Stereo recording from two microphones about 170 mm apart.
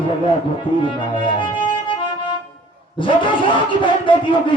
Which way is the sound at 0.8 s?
30° left (ahead or behind).